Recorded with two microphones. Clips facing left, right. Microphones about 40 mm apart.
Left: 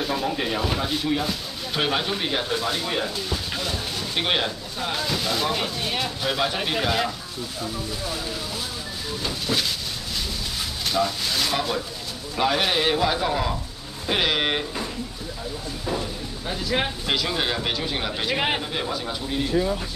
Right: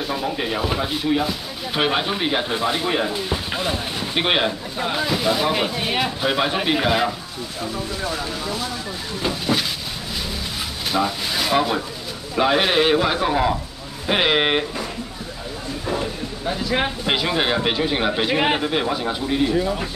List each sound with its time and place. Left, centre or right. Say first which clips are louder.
0.0 s speech: right 1 dB; centre
10.9 s speech: right 2 dB; centre
16.4 s speech: right 3 dB; centre
17.0 s speech: right 4 dB; right
18.6 s speech: right 6 dB; right